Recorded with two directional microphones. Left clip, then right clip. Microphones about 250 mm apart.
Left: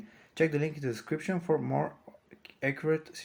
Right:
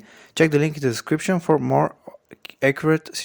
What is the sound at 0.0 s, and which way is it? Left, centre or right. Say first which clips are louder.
Speech: right 10 dB; right.